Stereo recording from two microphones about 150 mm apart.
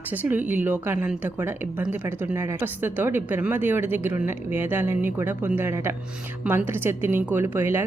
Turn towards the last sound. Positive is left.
turn(degrees=-15)  # may be behind; listen again after turning